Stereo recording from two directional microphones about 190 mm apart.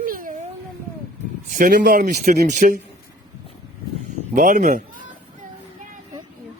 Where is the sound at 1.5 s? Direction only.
45° right (ahead or behind).